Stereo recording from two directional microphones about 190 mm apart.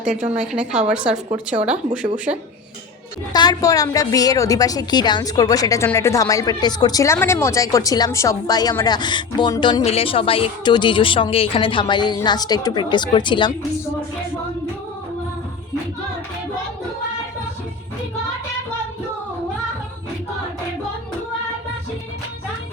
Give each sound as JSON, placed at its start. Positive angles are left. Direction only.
{"t": 0.3, "sound": "a woman's voice", "side_deg": -5}
{"t": 3.3, "sound": "a woman's voice", "side_deg": 20}